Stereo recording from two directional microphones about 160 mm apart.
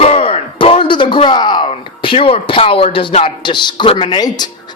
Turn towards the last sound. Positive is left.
turn(degrees=25)  # may be behind; listen again after turning